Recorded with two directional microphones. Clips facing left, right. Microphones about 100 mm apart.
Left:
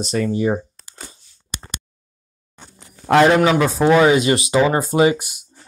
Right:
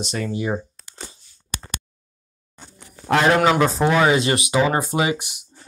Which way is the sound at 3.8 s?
20° right (ahead or behind).